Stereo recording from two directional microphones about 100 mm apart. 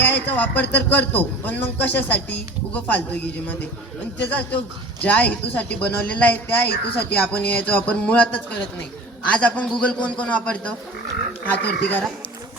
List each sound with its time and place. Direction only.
0.0 s a man's voice: 20° left (ahead or behind)